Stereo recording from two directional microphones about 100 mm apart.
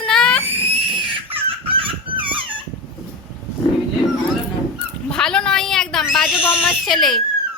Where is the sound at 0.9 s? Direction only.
60° right (ahead or behind).